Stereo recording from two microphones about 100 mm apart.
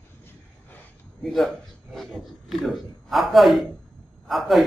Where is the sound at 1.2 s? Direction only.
5° left (ahead or behind).